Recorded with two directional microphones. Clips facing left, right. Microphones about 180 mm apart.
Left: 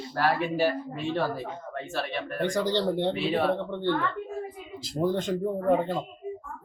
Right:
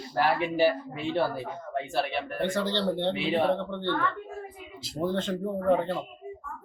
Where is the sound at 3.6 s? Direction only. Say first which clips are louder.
Left 3 dB; 10° left (ahead or behind).